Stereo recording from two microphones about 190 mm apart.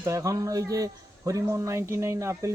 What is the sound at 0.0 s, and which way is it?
Speech, 15° right (ahead or behind).